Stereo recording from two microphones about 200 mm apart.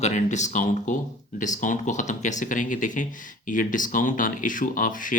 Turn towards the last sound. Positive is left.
turn(degrees=40)  # may be behind; listen again after turning